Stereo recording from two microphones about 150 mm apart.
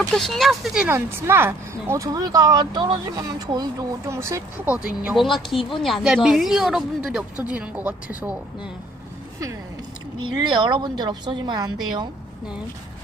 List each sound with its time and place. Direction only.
0.1 s speech: centre (ahead or behind)
0.9 s speech: 15° right (ahead or behind)
5.0 s speech: centre (ahead or behind)
10.4 s speech: 30° right (ahead or behind)